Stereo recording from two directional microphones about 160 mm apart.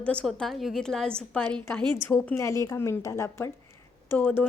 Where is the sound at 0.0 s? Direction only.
5° left (ahead or behind).